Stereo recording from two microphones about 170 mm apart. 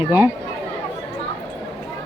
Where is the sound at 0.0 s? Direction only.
15° right (ahead or behind).